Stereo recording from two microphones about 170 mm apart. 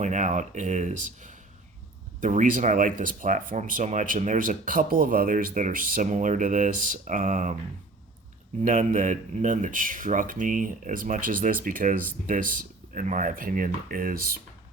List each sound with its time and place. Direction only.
0.0 s speech: 45° right (ahead or behind)
8.6 s speech: 50° right (ahead or behind)